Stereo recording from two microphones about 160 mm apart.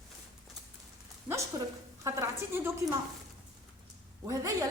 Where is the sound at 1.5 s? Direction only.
20° right (ahead or behind).